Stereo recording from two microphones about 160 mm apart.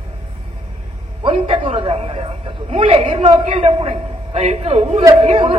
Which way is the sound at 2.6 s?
35° right (ahead or behind).